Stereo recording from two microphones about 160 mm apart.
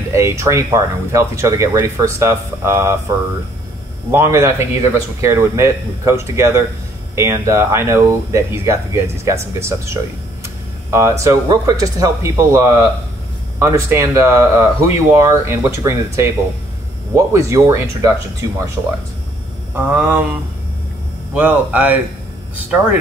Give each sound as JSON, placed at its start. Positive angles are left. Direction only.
{"t": 0.1, "sound": "speech", "side_deg": -20}
{"t": 4.1, "sound": "speech", "side_deg": -15}
{"t": 19.7, "sound": "speech", "side_deg": -10}
{"t": 21.4, "sound": "speech", "side_deg": -10}